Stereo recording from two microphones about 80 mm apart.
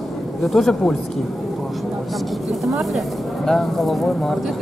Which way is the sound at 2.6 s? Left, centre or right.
Centre.